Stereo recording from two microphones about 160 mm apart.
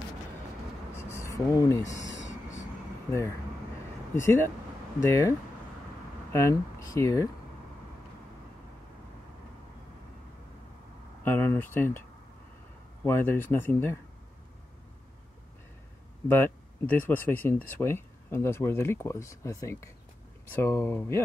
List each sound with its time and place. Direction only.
1.1 s speech: 15° left (ahead or behind)
4.1 s speech: 15° left (ahead or behind)
6.3 s speech: 15° left (ahead or behind)
11.2 s speech: 15° left (ahead or behind)
13.0 s speech: 15° left (ahead or behind)
16.3 s speech: 15° left (ahead or behind)